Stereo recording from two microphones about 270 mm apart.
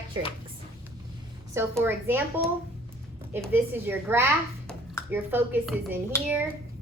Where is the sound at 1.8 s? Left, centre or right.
Centre.